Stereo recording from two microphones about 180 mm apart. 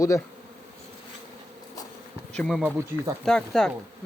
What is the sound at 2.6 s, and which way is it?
Speech, 15° right (ahead or behind).